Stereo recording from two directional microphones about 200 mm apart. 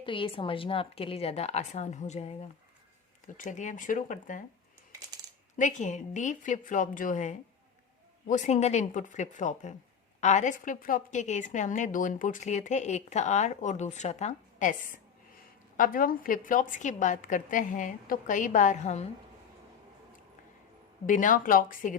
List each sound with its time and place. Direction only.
0.0 s a woman's voice: 25° left (ahead or behind)
5.5 s a woman's voice: 40° left (ahead or behind)
21.1 s speech: 40° left (ahead or behind)